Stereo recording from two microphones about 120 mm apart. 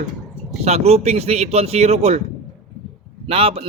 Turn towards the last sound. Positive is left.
turn(degrees=-55)  # may be behind; listen again after turning